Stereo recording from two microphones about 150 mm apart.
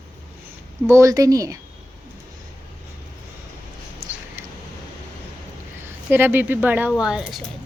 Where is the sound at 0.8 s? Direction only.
20° right (ahead or behind).